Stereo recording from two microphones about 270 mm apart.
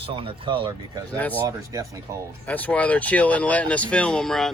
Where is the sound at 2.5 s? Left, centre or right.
Centre.